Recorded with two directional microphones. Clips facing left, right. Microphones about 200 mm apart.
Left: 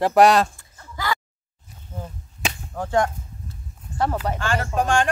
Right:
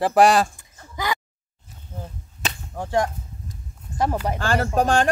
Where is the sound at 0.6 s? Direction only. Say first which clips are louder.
Right 2 dB; 15° right (ahead or behind).